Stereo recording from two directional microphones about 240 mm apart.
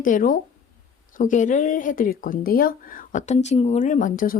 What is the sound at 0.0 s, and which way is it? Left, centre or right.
Speech, left.